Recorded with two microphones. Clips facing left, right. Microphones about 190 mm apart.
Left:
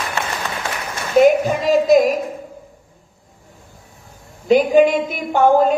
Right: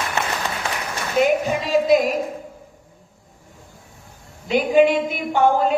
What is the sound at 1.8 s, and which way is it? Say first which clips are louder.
Speech: left 4 dB; 45° left (ahead or behind).